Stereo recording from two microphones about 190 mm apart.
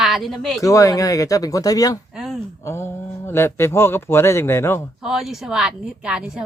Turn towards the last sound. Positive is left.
turn(degrees=-5)  # may be behind; listen again after turning